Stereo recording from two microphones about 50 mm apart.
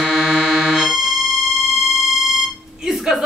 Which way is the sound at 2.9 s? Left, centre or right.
Centre.